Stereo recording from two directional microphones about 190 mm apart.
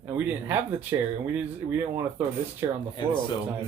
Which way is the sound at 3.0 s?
25° left (ahead or behind).